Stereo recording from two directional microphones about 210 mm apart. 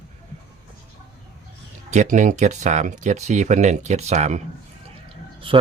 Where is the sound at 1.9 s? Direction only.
35° right (ahead or behind).